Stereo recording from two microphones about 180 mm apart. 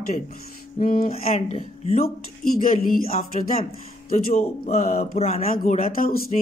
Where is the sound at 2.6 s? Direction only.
50° left (ahead or behind).